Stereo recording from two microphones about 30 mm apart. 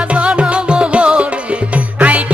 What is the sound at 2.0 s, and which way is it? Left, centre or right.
Music, right.